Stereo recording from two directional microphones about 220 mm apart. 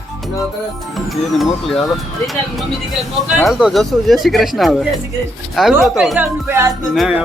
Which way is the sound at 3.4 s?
Centre (ahead or behind).